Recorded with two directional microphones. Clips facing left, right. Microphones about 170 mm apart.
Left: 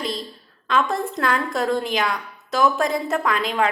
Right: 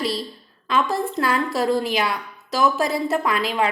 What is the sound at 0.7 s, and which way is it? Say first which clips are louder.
Speech: even; centre (ahead or behind).